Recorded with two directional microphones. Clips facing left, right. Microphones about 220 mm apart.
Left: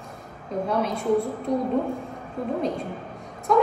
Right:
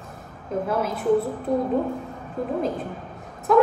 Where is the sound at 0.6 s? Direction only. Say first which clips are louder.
Left 1 dB; 5° right (ahead or behind).